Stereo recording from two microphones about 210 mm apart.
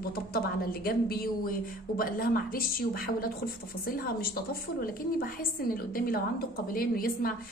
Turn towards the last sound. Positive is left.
turn(degrees=45)  # may be behind; listen again after turning